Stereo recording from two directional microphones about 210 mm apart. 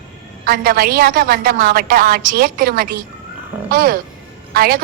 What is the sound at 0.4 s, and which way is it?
A woman's voice, 45° right (ahead or behind).